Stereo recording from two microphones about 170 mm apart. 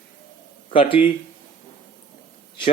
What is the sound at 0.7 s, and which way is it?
Speech, 30° left (ahead or behind).